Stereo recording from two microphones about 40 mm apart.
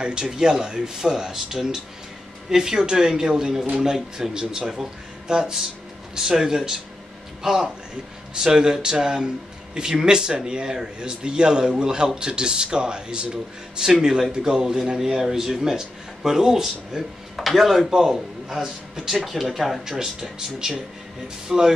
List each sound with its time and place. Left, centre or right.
0.0 s speech: right; by 20.0 s centre
20.0 s speech: centre